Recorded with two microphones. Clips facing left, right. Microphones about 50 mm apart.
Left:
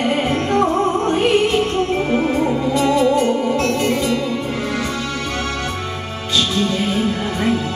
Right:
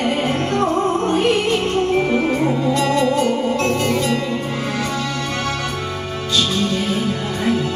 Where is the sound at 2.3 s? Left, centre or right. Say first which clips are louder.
Even; centre.